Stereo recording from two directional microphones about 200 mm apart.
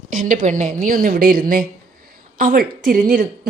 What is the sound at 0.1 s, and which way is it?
A woman's voice, 45° right (ahead or behind).